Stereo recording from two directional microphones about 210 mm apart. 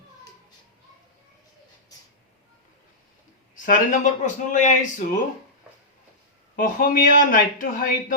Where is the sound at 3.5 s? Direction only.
40° left (ahead or behind).